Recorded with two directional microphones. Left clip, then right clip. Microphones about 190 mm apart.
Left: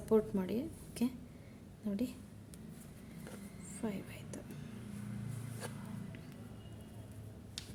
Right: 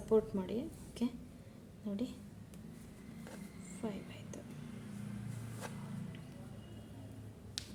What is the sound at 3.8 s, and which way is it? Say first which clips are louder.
Speech: left 1 dB; 30° left (ahead or behind).